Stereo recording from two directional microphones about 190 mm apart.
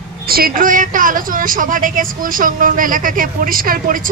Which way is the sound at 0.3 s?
50° right (ahead or behind).